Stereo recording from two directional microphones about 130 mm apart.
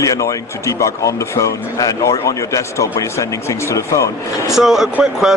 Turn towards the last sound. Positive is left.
turn(degrees=-5)  # may be behind; listen again after turning